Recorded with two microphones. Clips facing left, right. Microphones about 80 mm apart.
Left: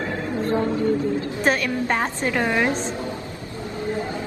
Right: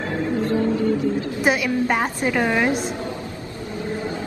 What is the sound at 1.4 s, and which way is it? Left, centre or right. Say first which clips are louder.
A woman's voice: right 2 dB; centre.